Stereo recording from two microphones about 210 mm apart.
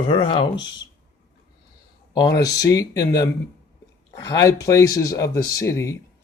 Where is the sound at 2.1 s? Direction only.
20° left (ahead or behind).